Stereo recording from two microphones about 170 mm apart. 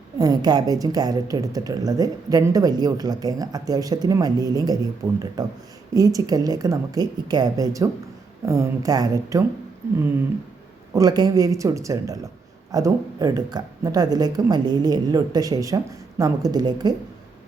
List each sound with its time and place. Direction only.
0.2 s speech: 25° right (ahead or behind)
10.9 s speech: 20° right (ahead or behind)